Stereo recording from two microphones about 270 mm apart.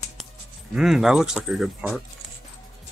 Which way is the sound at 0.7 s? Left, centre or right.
Centre.